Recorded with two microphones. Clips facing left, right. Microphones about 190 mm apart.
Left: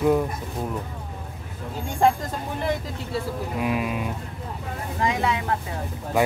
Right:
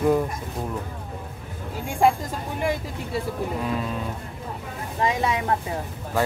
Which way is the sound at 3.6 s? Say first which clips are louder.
Left 2 dB; 15° left (ahead or behind).